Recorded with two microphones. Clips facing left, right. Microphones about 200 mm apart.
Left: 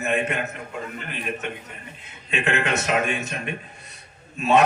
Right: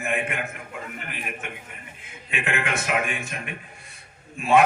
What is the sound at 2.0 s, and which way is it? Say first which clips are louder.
A man's voice: left 4 dB; 25° left (ahead or behind).